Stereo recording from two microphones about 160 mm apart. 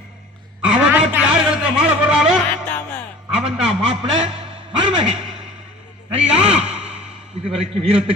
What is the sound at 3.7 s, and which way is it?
Speech, 35° right (ahead or behind).